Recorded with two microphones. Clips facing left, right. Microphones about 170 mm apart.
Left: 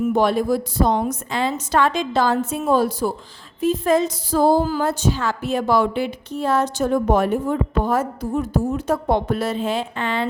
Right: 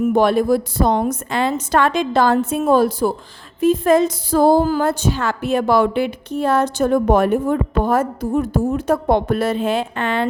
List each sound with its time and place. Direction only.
0.1 s speech: 60° right (ahead or behind)